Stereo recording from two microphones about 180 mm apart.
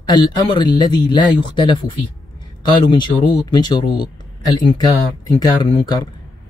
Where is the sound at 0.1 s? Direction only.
25° left (ahead or behind).